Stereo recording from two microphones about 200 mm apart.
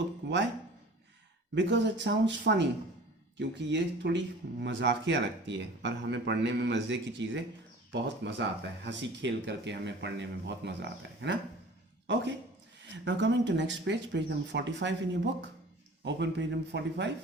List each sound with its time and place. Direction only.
0.2 s a sound: 55° right (ahead or behind)
1.5 s speech: 65° right (ahead or behind)
16.0 s speech: 60° right (ahead or behind)